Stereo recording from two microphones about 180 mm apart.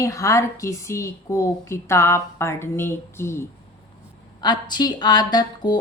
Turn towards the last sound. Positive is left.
turn(degrees=25)  # may be behind; listen again after turning